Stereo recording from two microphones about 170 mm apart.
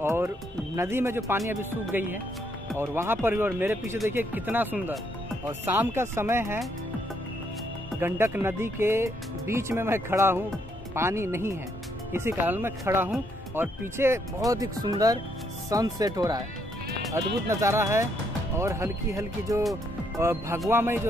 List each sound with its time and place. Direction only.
0.0 s music: 15° right (ahead or behind)
0.7 s speech: 15° right (ahead or behind)
8.0 s speech: 15° right (ahead or behind)